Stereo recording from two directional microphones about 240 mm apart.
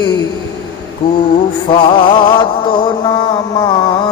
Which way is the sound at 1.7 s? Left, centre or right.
Left.